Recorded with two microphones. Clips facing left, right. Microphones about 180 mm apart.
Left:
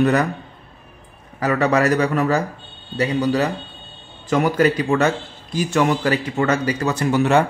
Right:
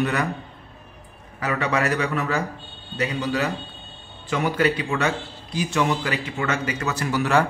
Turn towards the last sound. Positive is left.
turn(degrees=25)  # may be behind; listen again after turning